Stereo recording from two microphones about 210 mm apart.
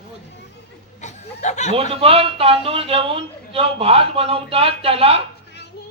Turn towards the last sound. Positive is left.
turn(degrees=-25)  # may be behind; listen again after turning